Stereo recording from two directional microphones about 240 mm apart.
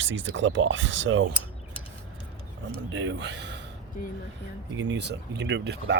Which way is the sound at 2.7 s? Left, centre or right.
Right.